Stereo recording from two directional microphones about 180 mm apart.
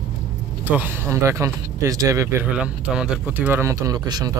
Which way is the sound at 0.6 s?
10° right (ahead or behind).